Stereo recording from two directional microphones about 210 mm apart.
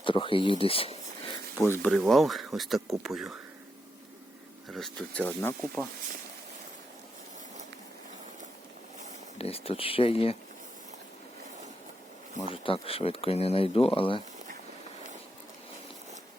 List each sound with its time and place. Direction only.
0.0 s speech: 25° left (ahead or behind)
0.6 s a sound: 25° left (ahead or behind)
1.5 s speech: 10° left (ahead or behind)
1.9 s speech: centre (ahead or behind)
4.7 s speech: centre (ahead or behind)
9.4 s speech: 30° left (ahead or behind)
12.6 s speech: 25° left (ahead or behind)